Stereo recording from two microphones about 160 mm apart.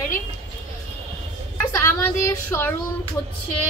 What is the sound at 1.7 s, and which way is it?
A woman's voice, 15° left (ahead or behind).